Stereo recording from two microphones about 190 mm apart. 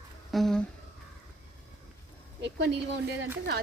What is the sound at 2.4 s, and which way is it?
Speech, 65° right (ahead or behind).